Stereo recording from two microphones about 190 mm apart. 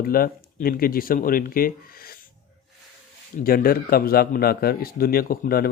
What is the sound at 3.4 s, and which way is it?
Speech, 50° left (ahead or behind).